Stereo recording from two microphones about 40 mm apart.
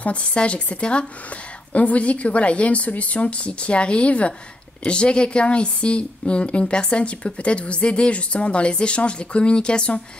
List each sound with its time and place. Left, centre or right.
0.0 s a woman's voice: left